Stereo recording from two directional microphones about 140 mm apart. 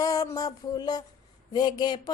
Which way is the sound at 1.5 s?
30° left (ahead or behind).